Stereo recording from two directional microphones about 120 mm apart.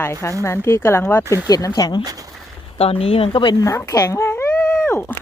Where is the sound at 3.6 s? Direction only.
25° left (ahead or behind).